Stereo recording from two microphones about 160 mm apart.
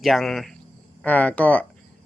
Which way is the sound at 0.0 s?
Centre (ahead or behind).